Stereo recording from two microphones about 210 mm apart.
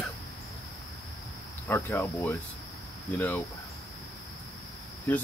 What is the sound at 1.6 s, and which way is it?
Speech, 10° left (ahead or behind).